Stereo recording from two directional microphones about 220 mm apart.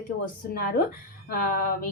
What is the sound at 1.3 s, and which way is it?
Speech, 40° left (ahead or behind).